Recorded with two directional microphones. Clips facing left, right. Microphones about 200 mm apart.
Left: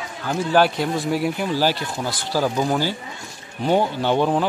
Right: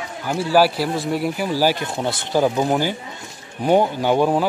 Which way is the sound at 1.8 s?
25° right (ahead or behind).